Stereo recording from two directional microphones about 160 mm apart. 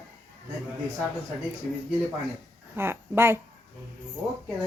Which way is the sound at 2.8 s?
15° right (ahead or behind).